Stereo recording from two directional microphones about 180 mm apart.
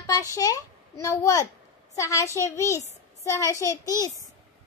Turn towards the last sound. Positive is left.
turn(degrees=20)  # may be behind; listen again after turning